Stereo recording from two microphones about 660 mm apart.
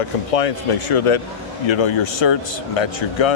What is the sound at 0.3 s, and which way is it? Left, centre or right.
Speech, left.